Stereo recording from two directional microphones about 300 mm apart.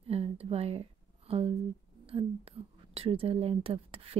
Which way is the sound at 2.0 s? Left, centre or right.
Centre.